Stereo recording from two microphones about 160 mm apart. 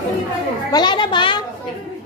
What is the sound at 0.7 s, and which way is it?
Speech, 25° left (ahead or behind).